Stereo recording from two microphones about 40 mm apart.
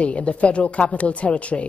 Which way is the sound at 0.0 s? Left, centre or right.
Left.